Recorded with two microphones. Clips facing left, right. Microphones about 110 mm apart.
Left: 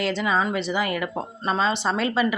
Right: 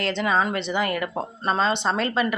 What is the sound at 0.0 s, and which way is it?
Speech, 5° left (ahead or behind).